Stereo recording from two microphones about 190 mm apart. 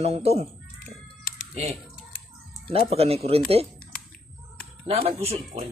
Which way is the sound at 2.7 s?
30° right (ahead or behind).